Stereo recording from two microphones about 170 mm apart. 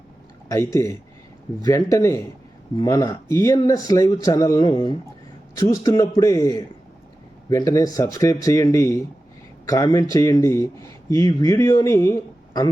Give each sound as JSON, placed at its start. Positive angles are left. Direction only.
{"t": 0.5, "sound": "speech", "side_deg": 20}